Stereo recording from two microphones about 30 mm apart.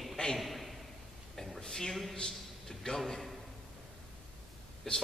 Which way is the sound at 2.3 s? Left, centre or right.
Centre.